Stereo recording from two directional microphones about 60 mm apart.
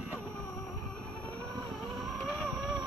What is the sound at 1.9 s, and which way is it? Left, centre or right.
Vehicle, centre.